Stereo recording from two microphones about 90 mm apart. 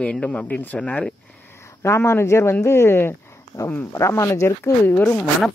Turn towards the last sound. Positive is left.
turn(degrees=20)  # may be behind; listen again after turning